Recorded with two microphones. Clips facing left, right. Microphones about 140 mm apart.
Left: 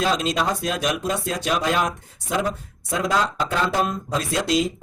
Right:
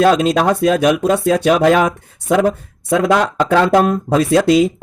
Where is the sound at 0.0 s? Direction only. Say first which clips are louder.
Right 10 dB; 60° right (ahead or behind).